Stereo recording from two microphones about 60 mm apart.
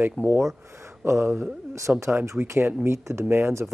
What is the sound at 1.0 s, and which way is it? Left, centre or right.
Speech, right.